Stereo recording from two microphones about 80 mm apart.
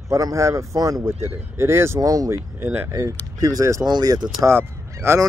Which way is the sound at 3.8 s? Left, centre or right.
Right.